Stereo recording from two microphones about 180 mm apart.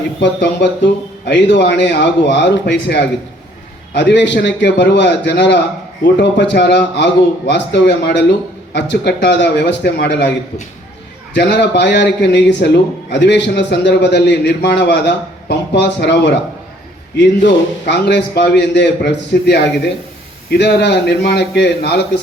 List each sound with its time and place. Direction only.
0.2 s a man's voice: 75° left (ahead or behind)
11.3 s a man's voice: 70° left (ahead or behind)